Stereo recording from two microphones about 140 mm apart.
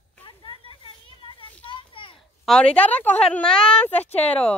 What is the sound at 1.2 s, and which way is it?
Children playing, 40° left (ahead or behind).